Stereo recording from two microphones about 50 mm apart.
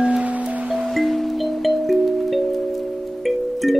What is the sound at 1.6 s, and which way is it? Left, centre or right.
Music, centre.